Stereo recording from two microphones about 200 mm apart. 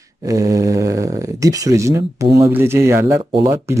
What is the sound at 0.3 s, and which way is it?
Speech, 15° right (ahead or behind).